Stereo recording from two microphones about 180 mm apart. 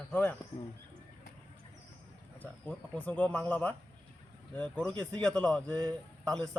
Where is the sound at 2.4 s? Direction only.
5° left (ahead or behind).